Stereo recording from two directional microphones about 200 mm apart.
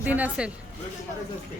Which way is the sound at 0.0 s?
5° right (ahead or behind).